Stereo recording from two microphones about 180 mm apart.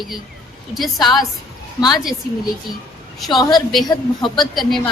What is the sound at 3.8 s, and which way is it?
Speech, 25° left (ahead or behind).